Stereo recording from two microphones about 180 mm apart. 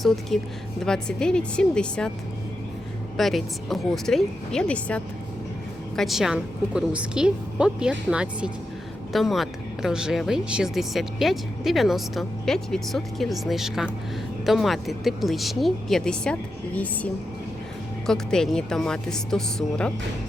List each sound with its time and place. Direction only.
0.3 s speech: centre (ahead or behind)
3.2 s speech: centre (ahead or behind)